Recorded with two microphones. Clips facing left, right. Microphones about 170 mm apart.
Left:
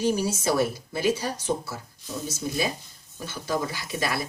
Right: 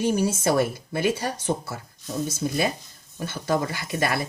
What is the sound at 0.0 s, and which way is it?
Speech, 55° right (ahead or behind).